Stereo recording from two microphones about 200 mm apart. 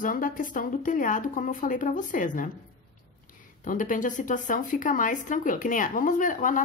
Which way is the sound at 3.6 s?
40° left (ahead or behind).